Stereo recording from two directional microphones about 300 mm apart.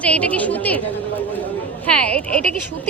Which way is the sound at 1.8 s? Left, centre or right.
Centre.